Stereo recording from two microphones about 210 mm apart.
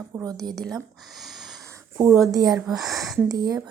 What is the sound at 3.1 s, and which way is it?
Speech, 15° right (ahead or behind).